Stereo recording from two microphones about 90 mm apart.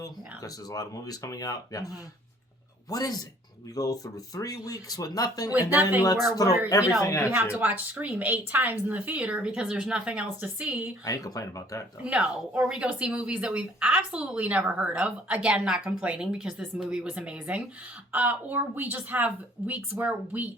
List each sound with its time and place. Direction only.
0.0 s speech: 40° left (ahead or behind)
6.7 s speech: 35° left (ahead or behind)
7.6 s speech: 20° right (ahead or behind)
11.0 s speech: 40° left (ahead or behind)
12.0 s speech: 10° right (ahead or behind)